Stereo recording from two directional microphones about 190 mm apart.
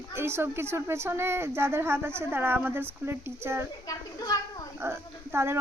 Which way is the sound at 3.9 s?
20° left (ahead or behind).